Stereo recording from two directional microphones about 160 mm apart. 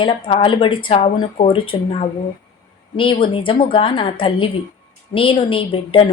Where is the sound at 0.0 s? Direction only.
35° left (ahead or behind).